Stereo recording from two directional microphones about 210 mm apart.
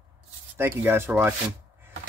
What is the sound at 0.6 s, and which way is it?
Speech, 10° right (ahead or behind).